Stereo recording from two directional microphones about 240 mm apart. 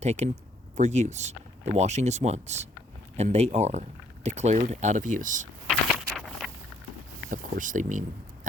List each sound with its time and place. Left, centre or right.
0.0 s speech: right
5.6 s a sound: centre
6.1 s walk: centre
7.3 s speech: right